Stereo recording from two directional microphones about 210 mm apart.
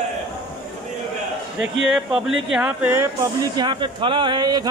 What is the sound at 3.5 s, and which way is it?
Speech, 20° right (ahead or behind).